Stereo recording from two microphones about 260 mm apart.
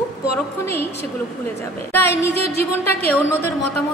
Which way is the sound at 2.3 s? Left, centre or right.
Right.